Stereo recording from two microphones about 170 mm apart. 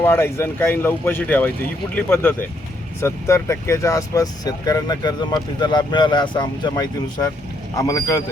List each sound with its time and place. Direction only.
0.0 s speech: 15° left (ahead or behind)